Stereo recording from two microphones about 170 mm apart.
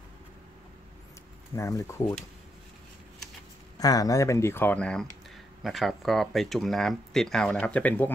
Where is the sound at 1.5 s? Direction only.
15° left (ahead or behind).